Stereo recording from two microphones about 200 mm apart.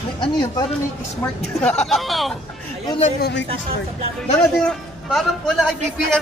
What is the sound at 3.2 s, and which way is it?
Speech, 55° left (ahead or behind).